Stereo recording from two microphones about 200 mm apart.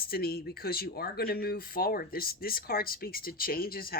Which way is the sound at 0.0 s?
50° left (ahead or behind).